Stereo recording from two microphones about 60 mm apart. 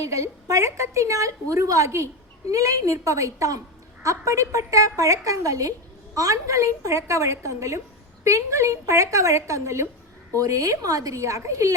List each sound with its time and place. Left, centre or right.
0.0 s a woman's voice: right
2.5 s a woman's voice: right
10.3 s a woman's voice: right